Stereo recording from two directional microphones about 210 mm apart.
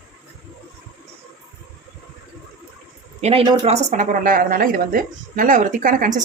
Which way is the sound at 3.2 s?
30° right (ahead or behind).